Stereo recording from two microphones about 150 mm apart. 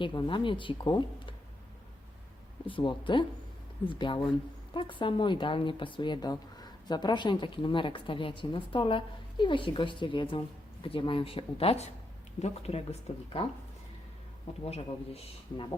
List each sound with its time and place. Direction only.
0.0 s speech: 30° left (ahead or behind)
2.6 s speech: 35° left (ahead or behind)
14.6 s speech: 40° left (ahead or behind)